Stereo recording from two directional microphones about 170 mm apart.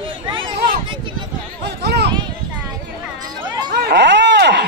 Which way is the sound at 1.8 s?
80° right.